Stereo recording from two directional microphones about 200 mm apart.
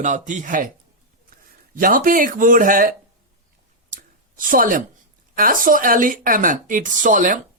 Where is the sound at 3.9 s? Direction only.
45° right (ahead or behind).